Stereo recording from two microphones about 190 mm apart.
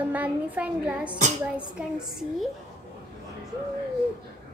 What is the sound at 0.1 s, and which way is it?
A child's voice, 10° right (ahead or behind).